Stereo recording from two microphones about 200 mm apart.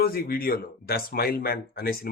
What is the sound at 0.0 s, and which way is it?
Speech, 50° left (ahead or behind).